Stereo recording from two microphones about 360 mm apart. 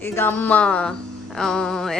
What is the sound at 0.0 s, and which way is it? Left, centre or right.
Speech, centre.